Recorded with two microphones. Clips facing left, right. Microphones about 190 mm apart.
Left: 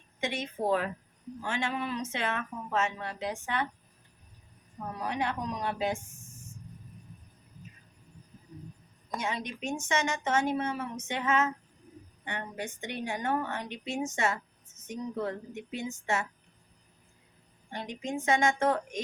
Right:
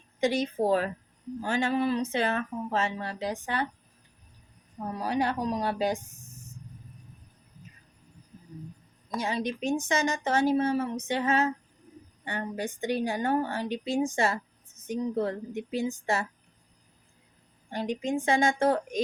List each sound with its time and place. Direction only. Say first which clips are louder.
0.2 s speech: right 7 dB; 35° right (ahead or behind)
4.9 s speech: right 5 dB; 35° right (ahead or behind)
9.1 s speech: right 5 dB; 35° right (ahead or behind)
17.7 s speech: right 6 dB; 35° right (ahead or behind)